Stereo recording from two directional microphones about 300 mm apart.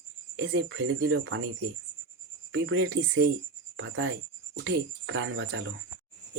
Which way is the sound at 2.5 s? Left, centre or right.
Right.